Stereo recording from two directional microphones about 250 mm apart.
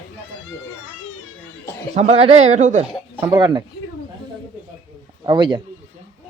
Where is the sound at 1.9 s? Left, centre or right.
Right.